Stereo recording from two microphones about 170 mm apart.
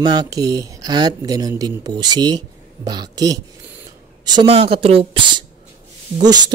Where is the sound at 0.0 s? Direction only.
25° right (ahead or behind).